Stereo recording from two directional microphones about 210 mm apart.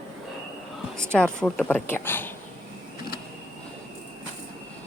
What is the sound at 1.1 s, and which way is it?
A woman's voice, 5° left (ahead or behind).